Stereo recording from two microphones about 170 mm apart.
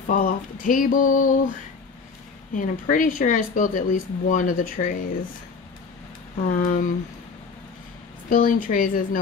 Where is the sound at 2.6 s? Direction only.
55° left (ahead or behind).